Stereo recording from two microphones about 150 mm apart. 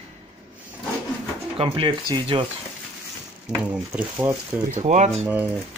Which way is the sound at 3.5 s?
15° right (ahead or behind).